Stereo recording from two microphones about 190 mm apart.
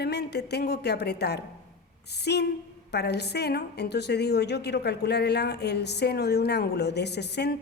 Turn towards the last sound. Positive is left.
turn(degrees=60)  # may be behind; listen again after turning